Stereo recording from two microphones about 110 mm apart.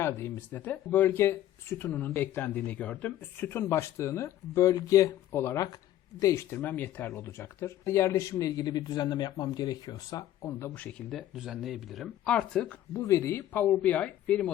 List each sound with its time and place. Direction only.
0.0 s speech: 20° left (ahead or behind); by 10.2 s 35° left (ahead or behind)
10.4 s speech: 20° left (ahead or behind)
11.1 s speech: centre (ahead or behind)
12.9 s speech: 25° left (ahead or behind); by 14.5 s 10° left (ahead or behind)